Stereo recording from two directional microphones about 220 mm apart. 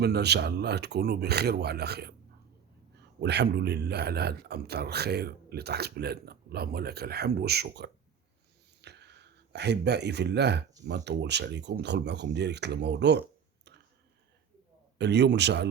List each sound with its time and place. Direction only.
0.0 s a man's voice: 50° right (ahead or behind)
8.8 s a sound: 50° right (ahead or behind)
10.8 s a man's voice: 50° right (ahead or behind)
14.9 s a man's voice: 50° right (ahead or behind)